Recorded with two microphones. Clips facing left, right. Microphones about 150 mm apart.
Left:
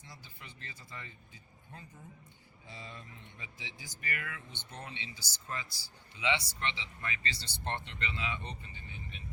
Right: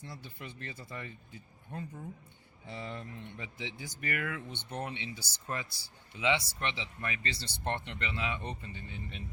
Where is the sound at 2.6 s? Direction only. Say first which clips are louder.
Right 7 dB; 60° right (ahead or behind).